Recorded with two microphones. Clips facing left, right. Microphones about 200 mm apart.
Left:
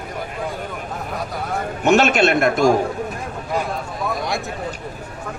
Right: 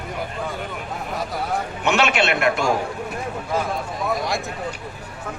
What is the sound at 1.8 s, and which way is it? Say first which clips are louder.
Speech: left 6 dB; 40° left (ahead or behind).